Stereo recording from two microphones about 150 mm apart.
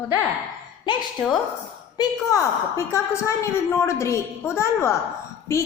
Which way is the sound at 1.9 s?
20° left (ahead or behind).